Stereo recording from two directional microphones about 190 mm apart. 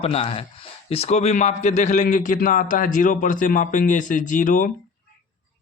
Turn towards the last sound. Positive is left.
turn(degrees=45)  # may be behind; listen again after turning